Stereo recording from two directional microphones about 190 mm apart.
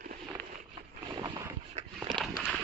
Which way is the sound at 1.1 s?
20° right (ahead or behind).